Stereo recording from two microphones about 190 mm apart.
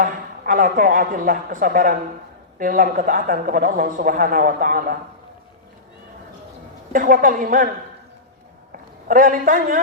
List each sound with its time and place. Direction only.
0.0 s speech: 45° right (ahead or behind)
6.9 s speech: 45° right (ahead or behind)
8.7 s a man's voice: 45° right (ahead or behind)